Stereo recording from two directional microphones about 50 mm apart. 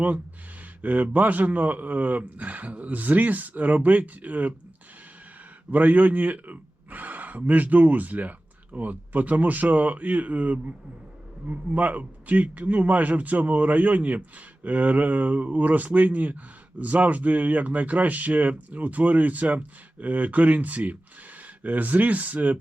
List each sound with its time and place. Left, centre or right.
0.8 s a man's voice: right
5.7 s a man's voice: right